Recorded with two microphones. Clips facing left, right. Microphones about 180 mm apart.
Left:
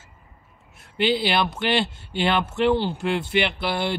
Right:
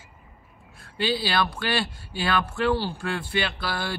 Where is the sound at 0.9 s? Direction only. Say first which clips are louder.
Left 3 dB; 20° left (ahead or behind).